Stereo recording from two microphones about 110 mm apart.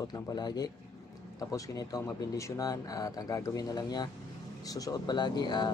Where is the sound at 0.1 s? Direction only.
40° left (ahead or behind).